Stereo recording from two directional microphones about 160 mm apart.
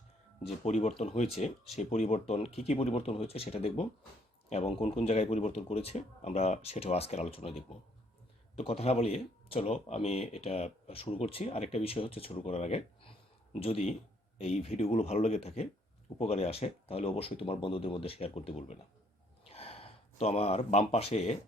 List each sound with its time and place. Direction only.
0.4 s speech: 40° left (ahead or behind)